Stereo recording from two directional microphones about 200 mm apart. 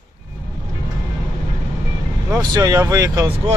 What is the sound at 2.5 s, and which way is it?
Speech, 15° right (ahead or behind).